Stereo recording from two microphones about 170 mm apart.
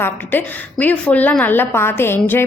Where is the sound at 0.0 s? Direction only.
10° left (ahead or behind).